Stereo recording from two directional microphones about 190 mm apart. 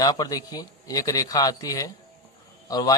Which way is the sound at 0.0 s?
20° left (ahead or behind).